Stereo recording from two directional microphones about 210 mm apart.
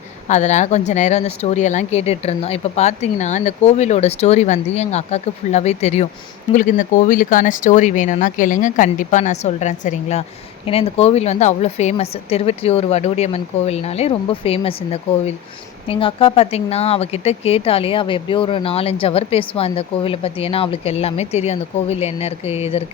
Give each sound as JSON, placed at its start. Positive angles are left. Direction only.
{"t": 0.3, "sound": "speech", "side_deg": 35}
{"t": 15.9, "sound": "speech", "side_deg": 25}